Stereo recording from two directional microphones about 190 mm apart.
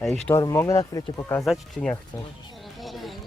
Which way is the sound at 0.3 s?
15° left (ahead or behind).